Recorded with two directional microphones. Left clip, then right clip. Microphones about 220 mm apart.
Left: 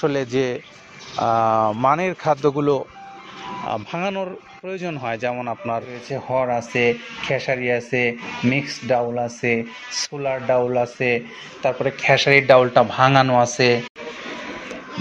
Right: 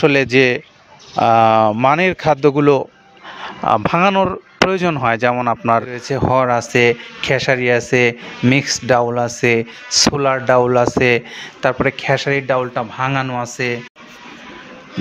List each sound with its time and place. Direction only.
0.0 s speech: 50° right (ahead or behind)
12.3 s speech: 20° right (ahead or behind)